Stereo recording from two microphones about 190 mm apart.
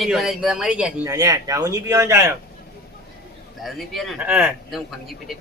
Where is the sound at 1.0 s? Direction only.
20° right (ahead or behind).